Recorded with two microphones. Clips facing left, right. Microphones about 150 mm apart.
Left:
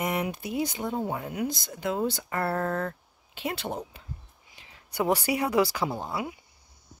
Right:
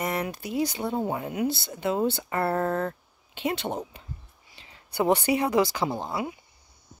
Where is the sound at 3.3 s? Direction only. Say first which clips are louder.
Right 4 dB; 5° left (ahead or behind).